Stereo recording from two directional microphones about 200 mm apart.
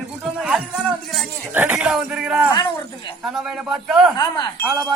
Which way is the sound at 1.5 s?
10° right (ahead or behind).